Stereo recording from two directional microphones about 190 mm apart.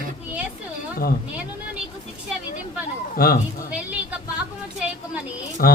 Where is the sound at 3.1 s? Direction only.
50° left (ahead or behind).